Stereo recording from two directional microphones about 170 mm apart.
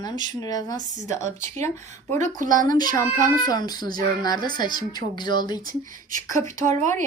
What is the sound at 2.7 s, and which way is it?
Speech, 25° left (ahead or behind).